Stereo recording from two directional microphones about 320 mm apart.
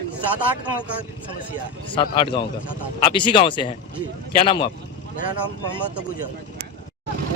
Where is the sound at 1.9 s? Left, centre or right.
Centre.